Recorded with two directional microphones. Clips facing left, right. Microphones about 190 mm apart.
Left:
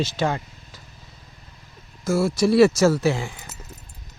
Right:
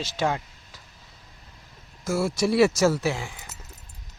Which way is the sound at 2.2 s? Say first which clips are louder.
Left 4 dB; 15° right (ahead or behind).